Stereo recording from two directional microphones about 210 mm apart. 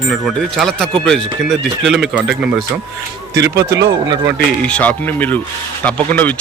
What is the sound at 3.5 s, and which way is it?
Speech, 55° right (ahead or behind).